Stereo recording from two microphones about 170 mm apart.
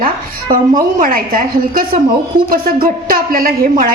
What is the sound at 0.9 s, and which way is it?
A woman's voice, 55° right (ahead or behind).